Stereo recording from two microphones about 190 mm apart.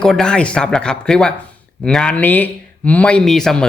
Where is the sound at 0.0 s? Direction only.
5° left (ahead or behind).